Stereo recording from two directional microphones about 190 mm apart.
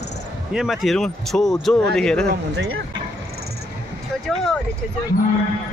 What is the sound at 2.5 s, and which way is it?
Speech, 65° right (ahead or behind).